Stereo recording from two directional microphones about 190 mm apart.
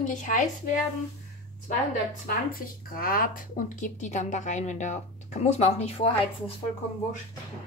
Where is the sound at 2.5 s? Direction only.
50° left (ahead or behind); by 6.5 s 30° left (ahead or behind).